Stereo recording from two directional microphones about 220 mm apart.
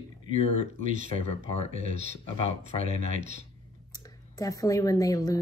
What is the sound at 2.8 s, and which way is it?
Speech, 40° right (ahead or behind).